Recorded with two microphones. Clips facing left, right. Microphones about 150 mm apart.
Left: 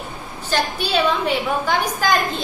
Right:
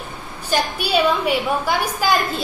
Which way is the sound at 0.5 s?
10° right (ahead or behind).